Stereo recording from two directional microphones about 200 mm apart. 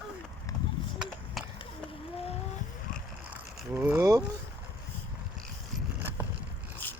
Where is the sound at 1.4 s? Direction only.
Centre (ahead or behind).